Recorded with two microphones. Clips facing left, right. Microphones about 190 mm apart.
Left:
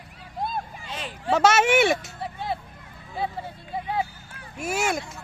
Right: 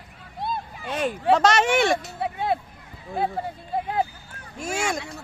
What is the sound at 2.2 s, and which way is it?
Hubbub, 60° right (ahead or behind).